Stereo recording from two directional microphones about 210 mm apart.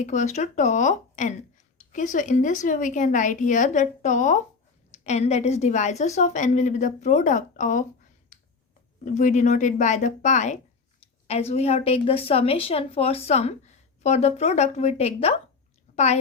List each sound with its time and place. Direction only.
0.0 s a woman's voice: 35° left (ahead or behind)
9.0 s a woman's voice: 35° left (ahead or behind)